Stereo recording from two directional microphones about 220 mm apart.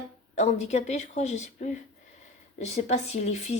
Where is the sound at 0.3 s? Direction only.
30° left (ahead or behind).